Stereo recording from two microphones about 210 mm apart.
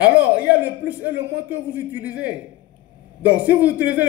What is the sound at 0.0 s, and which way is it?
A man's voice, 5° right (ahead or behind).